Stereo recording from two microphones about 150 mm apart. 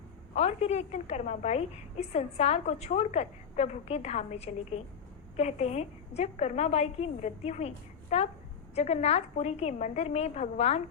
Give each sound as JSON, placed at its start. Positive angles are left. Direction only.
{"t": 0.3, "sound": "a woman's voice", "side_deg": 45}